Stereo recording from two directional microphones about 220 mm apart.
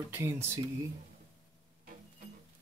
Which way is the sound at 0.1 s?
10° right (ahead or behind).